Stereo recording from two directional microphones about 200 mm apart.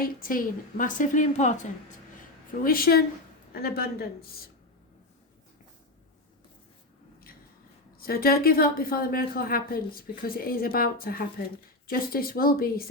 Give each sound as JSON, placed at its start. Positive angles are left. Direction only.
{"t": 0.0, "sound": "a woman's voice", "side_deg": 45}
{"t": 2.6, "sound": "a woman's voice", "side_deg": 45}
{"t": 7.9, "sound": "a woman's voice", "side_deg": 50}